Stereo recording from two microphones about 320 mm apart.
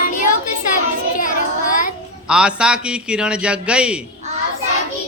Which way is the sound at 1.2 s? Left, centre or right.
Left.